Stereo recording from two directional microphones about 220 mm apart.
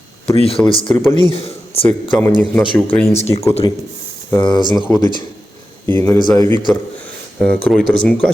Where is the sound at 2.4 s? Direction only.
5° left (ahead or behind).